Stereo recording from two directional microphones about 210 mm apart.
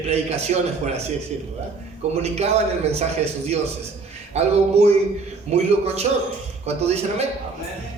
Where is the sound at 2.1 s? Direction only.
30° right (ahead or behind).